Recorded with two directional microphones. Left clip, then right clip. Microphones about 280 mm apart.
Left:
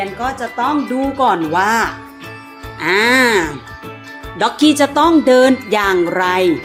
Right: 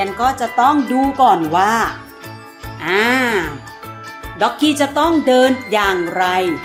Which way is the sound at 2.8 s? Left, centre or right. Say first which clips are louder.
Left 3 dB; centre.